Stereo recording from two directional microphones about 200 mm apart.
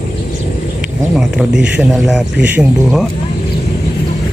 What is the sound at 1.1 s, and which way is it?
Speech, 5° right (ahead or behind).